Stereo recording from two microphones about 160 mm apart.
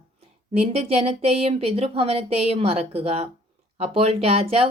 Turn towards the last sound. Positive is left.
turn(degrees=-40)  # may be behind; listen again after turning